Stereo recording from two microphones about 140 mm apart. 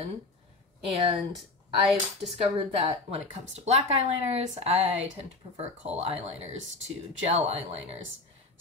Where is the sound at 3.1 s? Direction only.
45° right (ahead or behind).